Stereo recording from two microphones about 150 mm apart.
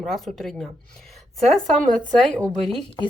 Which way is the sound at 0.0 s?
Centre (ahead or behind).